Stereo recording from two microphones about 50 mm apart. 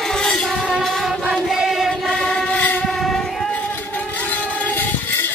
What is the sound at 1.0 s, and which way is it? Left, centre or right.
Chant, centre.